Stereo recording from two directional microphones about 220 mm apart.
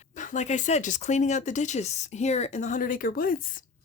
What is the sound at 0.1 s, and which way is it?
Speech, 35° left (ahead or behind).